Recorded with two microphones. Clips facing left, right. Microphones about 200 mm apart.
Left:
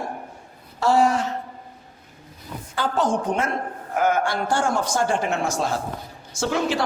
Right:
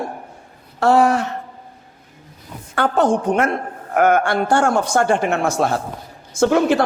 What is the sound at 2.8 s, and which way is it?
A man's voice, 60° right (ahead or behind).